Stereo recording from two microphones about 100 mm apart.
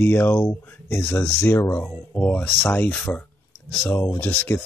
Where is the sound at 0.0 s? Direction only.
20° left (ahead or behind).